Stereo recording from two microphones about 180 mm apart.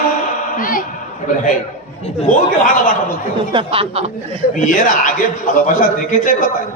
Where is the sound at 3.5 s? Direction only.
30° right (ahead or behind).